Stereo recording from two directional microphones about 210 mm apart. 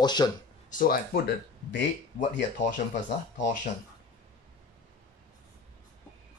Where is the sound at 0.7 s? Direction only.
45° left (ahead or behind).